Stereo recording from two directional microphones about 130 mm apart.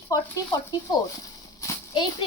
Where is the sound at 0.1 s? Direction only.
30° left (ahead or behind).